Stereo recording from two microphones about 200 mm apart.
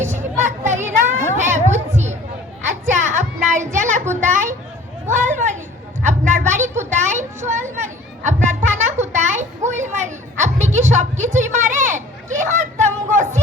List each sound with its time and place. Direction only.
0.0 s children playing: 35° right (ahead or behind)
2.8 s child singing: 35° right (ahead or behind)
4.1 s a sound: 40° right (ahead or behind)